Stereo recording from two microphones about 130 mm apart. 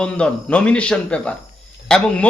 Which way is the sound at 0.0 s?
10° left (ahead or behind).